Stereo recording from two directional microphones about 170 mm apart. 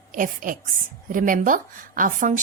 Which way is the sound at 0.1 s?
50° right (ahead or behind).